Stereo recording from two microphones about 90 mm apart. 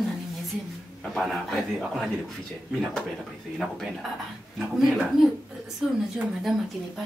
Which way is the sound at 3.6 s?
Centre (ahead or behind).